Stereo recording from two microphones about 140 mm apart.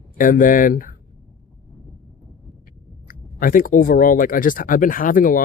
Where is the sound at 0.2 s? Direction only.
75° left (ahead or behind).